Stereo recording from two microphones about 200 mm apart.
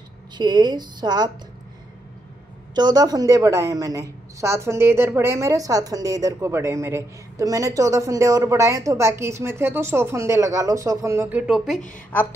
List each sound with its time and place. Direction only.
0.4 s a woman's voice: 20° right (ahead or behind)
2.7 s a woman's voice: 20° right (ahead or behind); by 11.8 s centre (ahead or behind)